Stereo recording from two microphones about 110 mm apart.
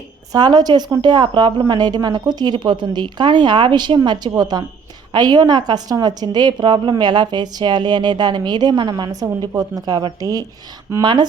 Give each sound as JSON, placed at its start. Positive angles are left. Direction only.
{"t": 0.3, "sound": "a woman's voice", "side_deg": -40}